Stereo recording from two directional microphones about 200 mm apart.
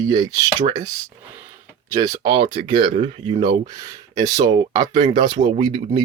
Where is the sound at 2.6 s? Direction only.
25° right (ahead or behind).